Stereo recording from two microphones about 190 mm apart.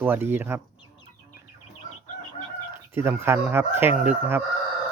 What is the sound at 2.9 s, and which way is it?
Speech, 10° right (ahead or behind).